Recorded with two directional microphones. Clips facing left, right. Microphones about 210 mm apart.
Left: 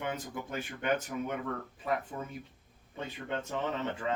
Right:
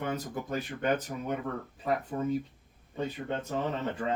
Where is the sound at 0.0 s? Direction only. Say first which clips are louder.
Right 3 dB; 40° right (ahead or behind).